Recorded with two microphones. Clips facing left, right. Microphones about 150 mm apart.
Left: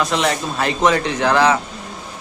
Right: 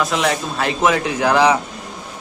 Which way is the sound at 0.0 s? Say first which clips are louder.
Even; centre (ahead or behind).